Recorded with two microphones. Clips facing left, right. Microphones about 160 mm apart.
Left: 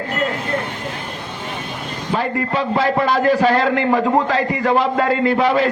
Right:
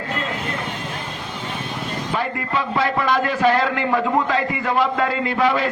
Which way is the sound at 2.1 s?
35° left (ahead or behind).